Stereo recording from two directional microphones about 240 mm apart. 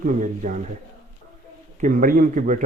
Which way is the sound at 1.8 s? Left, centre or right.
Right.